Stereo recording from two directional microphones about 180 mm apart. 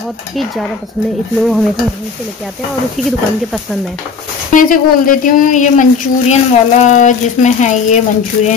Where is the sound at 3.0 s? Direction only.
Centre (ahead or behind).